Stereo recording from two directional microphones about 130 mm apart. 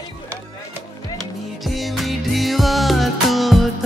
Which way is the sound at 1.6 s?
Centre (ahead or behind).